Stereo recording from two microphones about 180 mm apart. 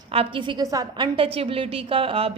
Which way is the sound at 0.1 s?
30° right (ahead or behind).